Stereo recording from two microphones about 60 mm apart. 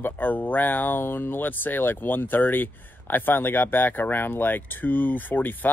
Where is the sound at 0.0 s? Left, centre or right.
Left.